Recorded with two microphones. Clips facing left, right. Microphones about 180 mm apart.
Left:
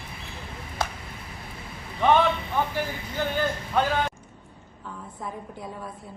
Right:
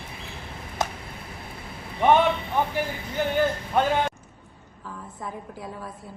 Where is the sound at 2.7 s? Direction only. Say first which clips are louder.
Right 2 dB; 15° right (ahead or behind).